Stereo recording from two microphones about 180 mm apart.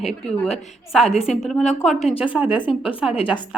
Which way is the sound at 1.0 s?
35° left (ahead or behind).